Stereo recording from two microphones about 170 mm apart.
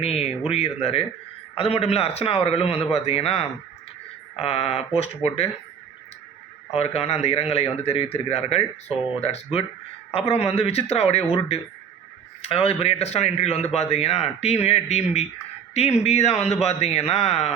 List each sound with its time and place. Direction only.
0.0 s a man's voice: 35° left (ahead or behind)
6.7 s a man's voice: 40° left (ahead or behind)
12.4 s a man's voice: 35° left (ahead or behind)